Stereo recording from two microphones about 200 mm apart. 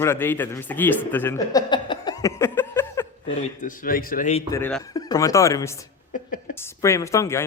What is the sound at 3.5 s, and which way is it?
Speech, 40° left (ahead or behind).